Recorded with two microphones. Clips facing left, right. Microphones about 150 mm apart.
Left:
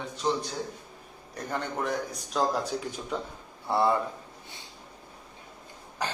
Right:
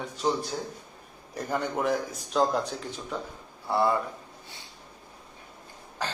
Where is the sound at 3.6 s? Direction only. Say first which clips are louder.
Even; 20° left (ahead or behind).